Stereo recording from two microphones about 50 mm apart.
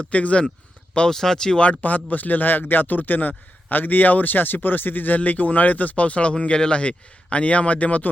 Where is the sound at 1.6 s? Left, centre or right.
Left.